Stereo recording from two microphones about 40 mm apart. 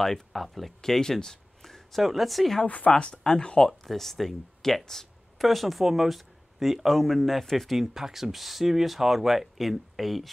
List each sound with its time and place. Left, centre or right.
0.0 s speech: centre
2.6 s speech: left
3.0 s speech: left
3.6 s speech: centre
7.8 s speech: centre